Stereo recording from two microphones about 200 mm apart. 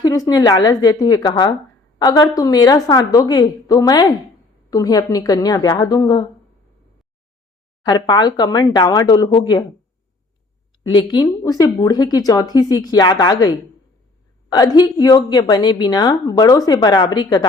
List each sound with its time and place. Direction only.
0.0 s a woman's voice: 20° left (ahead or behind)
7.9 s a woman's voice: 20° left (ahead or behind)
10.8 s a woman's voice: 25° left (ahead or behind)